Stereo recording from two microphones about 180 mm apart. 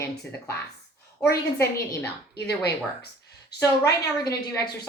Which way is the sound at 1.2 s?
15° left (ahead or behind).